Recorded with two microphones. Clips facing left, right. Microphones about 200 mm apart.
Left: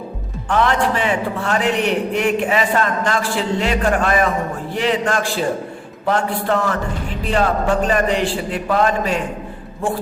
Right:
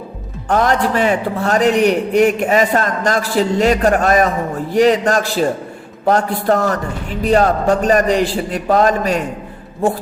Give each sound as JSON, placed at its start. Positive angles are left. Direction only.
{"t": 0.4, "sound": "a man's voice", "side_deg": -40}